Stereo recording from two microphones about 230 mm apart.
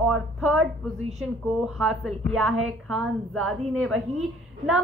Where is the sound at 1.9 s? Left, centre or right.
Centre.